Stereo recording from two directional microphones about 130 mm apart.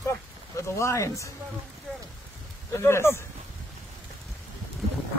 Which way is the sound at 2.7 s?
20° left (ahead or behind).